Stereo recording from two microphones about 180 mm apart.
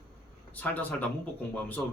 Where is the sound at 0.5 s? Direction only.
10° left (ahead or behind).